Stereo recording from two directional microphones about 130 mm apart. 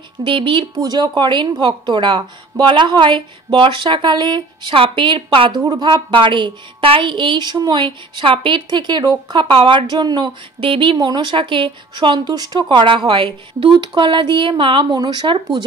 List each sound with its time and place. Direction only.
0.2 s a woman's voice: 40° right (ahead or behind)
0.7 s a woman's voice: 30° right (ahead or behind)